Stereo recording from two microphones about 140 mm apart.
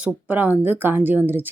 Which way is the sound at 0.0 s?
10° right (ahead or behind).